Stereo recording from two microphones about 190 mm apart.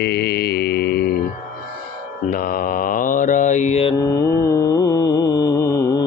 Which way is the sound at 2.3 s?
50° left (ahead or behind).